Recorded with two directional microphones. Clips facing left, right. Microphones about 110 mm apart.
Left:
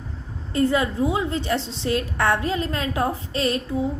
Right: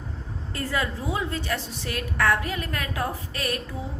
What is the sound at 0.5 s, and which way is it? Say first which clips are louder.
A woman's voice: left 8 dB; 20° left (ahead or behind).